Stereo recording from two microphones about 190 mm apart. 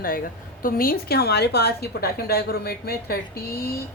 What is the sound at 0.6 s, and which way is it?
Speech, 50° left (ahead or behind).